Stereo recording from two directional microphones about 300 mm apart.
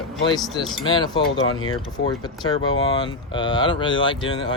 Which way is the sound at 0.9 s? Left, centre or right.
Centre.